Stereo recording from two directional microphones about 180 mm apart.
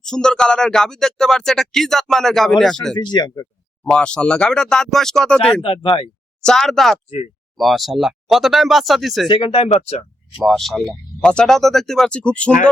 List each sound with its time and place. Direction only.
0.0 s speech: 5° left (ahead or behind)
2.9 s speech: 25° left (ahead or behind)
3.8 s speech: 5° left (ahead or behind)
5.6 s speech: 30° left (ahead or behind)
6.4 s speech: 5° left (ahead or behind)
9.3 s speech: 30° left (ahead or behind)
10.3 s speech: centre (ahead or behind)